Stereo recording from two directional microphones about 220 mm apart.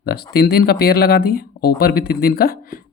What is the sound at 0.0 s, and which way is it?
Speech, 45° left (ahead or behind).